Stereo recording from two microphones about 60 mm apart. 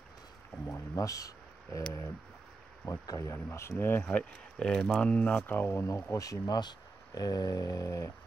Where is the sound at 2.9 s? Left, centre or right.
Left.